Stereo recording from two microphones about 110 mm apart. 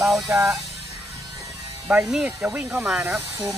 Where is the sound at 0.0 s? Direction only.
Centre (ahead or behind).